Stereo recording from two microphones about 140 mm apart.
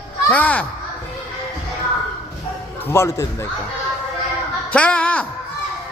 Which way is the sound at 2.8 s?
20° left (ahead or behind).